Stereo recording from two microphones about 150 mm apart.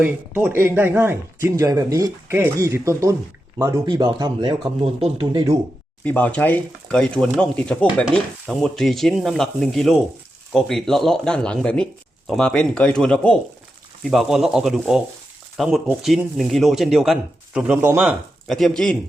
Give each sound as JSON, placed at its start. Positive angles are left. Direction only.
{"t": 0.0, "sound": "speech", "side_deg": -15}
{"t": 4.8, "sound": "speech", "side_deg": -40}
{"t": 6.1, "sound": "speech", "side_deg": 10}